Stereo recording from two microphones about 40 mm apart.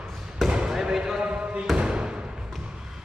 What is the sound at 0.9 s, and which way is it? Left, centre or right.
Speech, centre.